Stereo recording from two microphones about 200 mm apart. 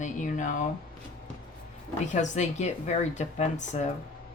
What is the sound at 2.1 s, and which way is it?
Speech, 35° left (ahead or behind).